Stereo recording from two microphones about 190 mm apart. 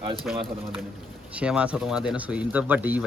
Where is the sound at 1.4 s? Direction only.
5° right (ahead or behind).